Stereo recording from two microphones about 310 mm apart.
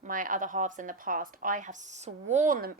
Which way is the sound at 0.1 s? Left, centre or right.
Right.